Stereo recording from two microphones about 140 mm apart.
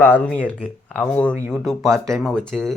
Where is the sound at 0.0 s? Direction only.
10° left (ahead or behind).